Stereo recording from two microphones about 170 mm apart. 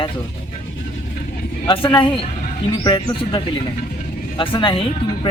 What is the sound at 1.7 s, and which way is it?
Speech, 30° left (ahead or behind).